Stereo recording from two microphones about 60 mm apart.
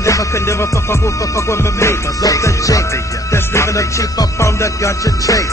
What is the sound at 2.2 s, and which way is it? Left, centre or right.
Music, left.